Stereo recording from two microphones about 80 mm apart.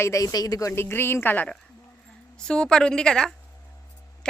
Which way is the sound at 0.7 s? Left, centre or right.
Left.